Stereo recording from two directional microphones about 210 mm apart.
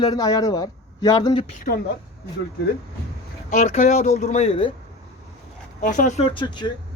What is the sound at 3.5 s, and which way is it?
Speech, 35° left (ahead or behind).